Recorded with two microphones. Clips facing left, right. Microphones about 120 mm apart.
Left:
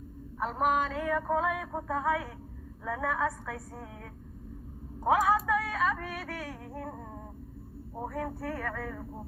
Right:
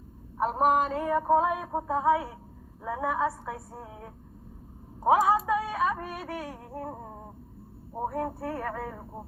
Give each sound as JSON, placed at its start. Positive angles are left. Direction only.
{"t": 0.3, "sound": "music", "side_deg": -30}
{"t": 5.0, "sound": "a sound", "side_deg": -20}
{"t": 8.0, "sound": "music", "side_deg": -25}